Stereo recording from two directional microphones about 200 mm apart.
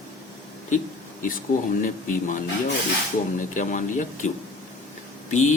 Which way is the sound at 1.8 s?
40° left (ahead or behind).